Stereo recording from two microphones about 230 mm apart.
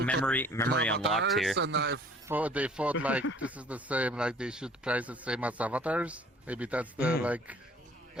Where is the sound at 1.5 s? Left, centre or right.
Right.